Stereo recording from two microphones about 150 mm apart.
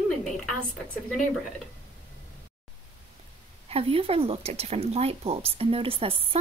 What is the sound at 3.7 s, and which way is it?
Speech, 40° right (ahead or behind).